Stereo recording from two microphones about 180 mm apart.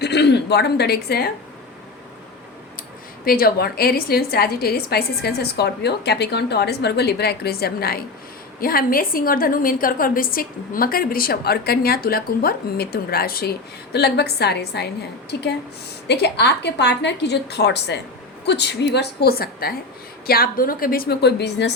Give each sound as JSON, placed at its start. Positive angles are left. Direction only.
{"t": 0.0, "sound": "speech", "side_deg": 70}
{"t": 3.2, "sound": "a woman's voice", "side_deg": 55}